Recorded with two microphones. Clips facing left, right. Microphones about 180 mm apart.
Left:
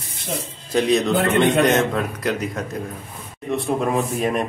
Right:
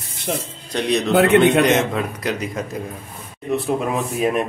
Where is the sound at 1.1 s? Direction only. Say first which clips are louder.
Right 5 dB; 70° right (ahead or behind).